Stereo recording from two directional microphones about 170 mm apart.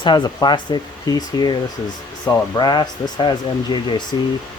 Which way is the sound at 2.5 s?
25° left (ahead or behind).